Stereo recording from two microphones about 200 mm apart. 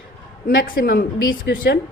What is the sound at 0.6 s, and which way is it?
Speech, 45° left (ahead or behind).